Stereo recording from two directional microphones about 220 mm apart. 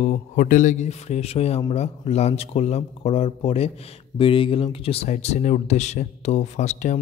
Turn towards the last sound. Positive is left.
turn(degrees=35)  # may be behind; listen again after turning